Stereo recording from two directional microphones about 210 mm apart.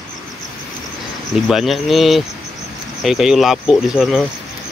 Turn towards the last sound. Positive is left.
turn(degrees=0)  # may be behind; listen again after turning